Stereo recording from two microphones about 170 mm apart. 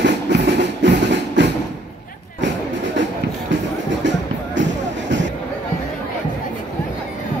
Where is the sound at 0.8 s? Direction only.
90° right.